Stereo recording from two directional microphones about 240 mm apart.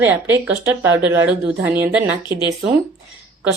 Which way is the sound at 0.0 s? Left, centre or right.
Centre.